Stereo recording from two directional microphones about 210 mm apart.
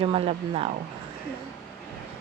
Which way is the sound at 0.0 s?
25° right (ahead or behind).